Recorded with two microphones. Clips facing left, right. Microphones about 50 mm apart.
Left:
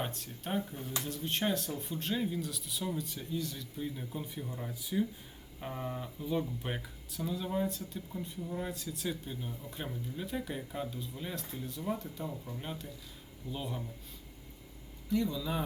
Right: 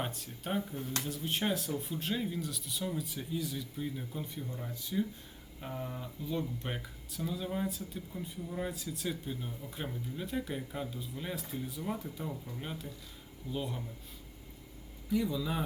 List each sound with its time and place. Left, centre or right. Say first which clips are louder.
0.0 s speech: even; centre
5.5 s music: left 2 dB; centre
6.2 s speech: left 2 dB; centre
15.1 s speech: even; centre